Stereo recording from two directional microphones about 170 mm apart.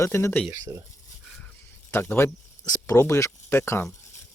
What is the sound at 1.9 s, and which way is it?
Speech, 15° left (ahead or behind).